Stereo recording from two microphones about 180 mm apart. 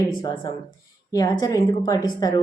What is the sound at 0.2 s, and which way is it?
A woman's voice, 25° left (ahead or behind).